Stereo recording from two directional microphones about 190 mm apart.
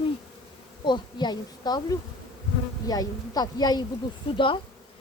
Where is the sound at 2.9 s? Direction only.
20° left (ahead or behind).